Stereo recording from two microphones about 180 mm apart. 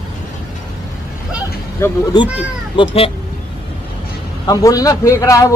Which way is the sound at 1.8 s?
20° left (ahead or behind).